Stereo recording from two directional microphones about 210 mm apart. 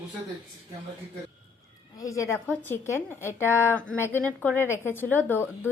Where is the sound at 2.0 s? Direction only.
15° left (ahead or behind).